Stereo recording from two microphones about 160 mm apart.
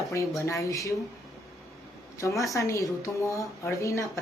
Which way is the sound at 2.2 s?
20° left (ahead or behind).